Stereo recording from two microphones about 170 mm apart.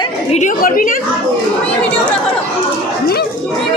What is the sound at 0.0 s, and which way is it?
A woman's voice, 40° left (ahead or behind).